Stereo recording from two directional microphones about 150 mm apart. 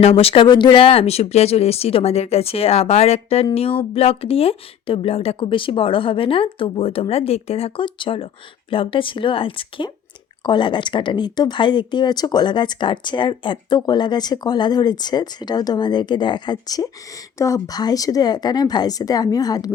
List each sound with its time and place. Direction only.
0.0 s speech: 40° left (ahead or behind); by 19.7 s 25° left (ahead or behind)